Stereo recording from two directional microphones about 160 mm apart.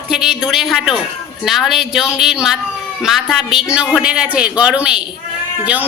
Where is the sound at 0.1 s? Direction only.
5° right (ahead or behind).